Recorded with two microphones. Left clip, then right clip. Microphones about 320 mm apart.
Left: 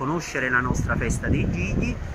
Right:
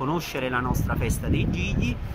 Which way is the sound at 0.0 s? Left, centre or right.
Centre.